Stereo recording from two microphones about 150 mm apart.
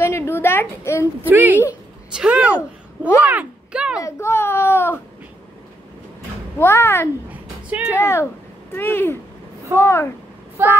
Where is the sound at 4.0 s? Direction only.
20° left (ahead or behind).